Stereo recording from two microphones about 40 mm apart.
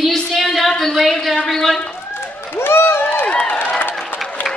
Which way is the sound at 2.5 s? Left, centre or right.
Left.